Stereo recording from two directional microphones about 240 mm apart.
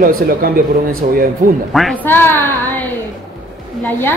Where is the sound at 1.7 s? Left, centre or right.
Centre.